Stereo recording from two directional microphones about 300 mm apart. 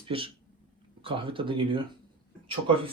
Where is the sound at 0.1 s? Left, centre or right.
Centre.